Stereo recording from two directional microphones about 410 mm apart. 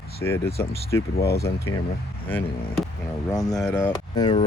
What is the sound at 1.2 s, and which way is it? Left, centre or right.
Speech, left.